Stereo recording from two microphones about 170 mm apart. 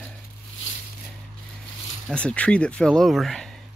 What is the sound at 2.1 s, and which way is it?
Speech, 5° left (ahead or behind).